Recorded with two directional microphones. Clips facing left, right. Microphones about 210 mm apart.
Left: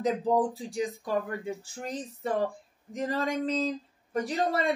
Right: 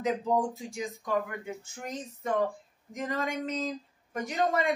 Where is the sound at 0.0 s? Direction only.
35° left (ahead or behind).